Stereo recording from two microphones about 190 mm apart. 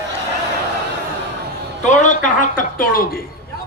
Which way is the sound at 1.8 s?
40° left (ahead or behind).